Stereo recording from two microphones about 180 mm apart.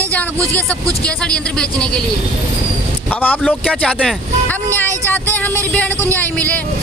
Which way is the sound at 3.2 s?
10° left (ahead or behind).